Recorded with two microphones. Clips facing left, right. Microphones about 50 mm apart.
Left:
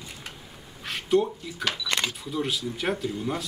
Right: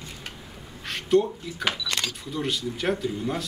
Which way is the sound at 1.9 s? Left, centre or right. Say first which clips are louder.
Left 2 dB; centre.